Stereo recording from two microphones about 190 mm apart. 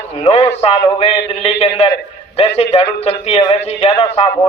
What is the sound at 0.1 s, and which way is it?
A man's voice, 30° left (ahead or behind).